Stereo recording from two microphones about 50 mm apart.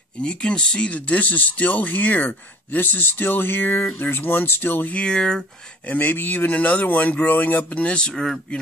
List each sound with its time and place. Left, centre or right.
0.2 s speech: centre; by 4.9 s left
4.9 s speech: centre
5.9 s speech: left
8.1 s speech: centre